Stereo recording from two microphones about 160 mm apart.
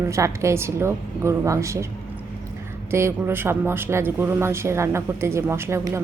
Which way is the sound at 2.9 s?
15° right (ahead or behind).